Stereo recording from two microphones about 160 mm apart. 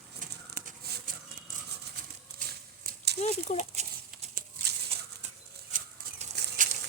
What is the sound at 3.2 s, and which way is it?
Speech, 40° left (ahead or behind).